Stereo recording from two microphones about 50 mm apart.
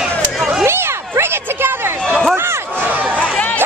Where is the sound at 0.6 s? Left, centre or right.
Right.